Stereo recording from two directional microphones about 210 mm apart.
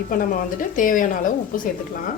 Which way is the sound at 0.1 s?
40° left (ahead or behind).